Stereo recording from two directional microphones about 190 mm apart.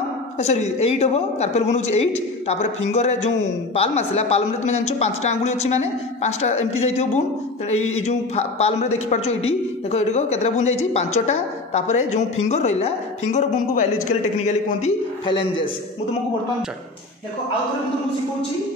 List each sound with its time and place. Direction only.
0.4 s a man's voice: 35° left (ahead or behind)